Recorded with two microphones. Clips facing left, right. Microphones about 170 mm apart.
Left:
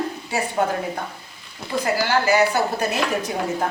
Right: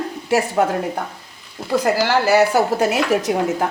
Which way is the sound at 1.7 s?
90° right.